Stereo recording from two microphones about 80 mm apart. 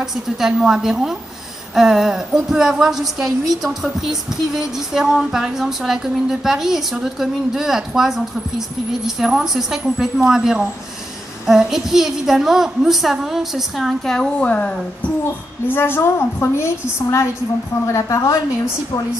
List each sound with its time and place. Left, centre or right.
0.0 s a woman's voice: centre
15.7 s a woman's voice: left